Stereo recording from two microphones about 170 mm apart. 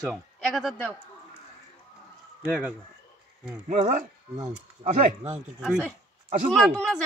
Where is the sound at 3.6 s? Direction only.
50° right (ahead or behind).